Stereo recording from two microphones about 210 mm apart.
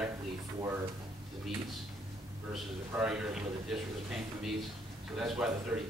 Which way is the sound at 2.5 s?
5° right (ahead or behind).